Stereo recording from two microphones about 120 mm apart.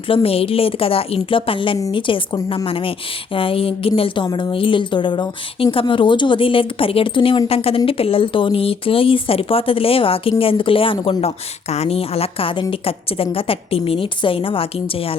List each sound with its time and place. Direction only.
0.1 s speech: 50° left (ahead or behind)